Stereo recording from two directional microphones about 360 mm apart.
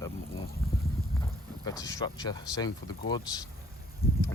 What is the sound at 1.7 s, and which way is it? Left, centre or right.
Speech, centre.